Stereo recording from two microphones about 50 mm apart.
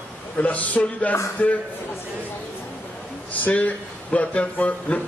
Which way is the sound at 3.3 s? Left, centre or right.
Left.